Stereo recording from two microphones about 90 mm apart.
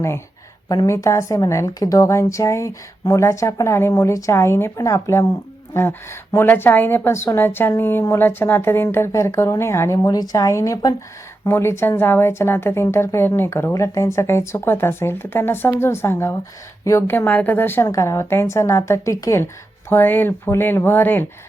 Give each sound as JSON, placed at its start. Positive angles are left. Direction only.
{"t": 0.9, "sound": "a woman's voice", "side_deg": 35}
{"t": 17.1, "sound": "a woman's voice", "side_deg": 20}
{"t": 17.8, "sound": "a woman's voice", "side_deg": 35}